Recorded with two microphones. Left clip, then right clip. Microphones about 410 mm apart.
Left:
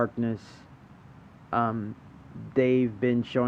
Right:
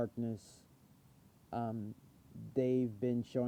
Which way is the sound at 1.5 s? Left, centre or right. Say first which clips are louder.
Left 14 dB; right.